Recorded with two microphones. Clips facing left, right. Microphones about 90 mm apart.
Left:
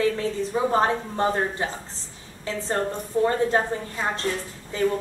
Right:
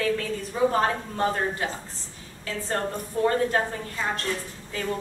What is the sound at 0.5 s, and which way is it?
A woman's voice, 20° left (ahead or behind).